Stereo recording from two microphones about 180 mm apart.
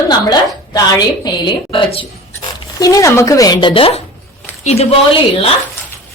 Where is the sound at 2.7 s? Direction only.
20° left (ahead or behind); by 4.9 s 35° left (ahead or behind).